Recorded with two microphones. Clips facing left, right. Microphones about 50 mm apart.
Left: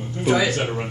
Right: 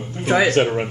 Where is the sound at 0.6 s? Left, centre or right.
Right.